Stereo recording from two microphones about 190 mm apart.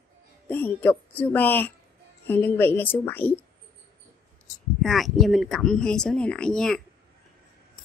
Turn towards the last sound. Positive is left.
turn(degrees=5)  # may be behind; listen again after turning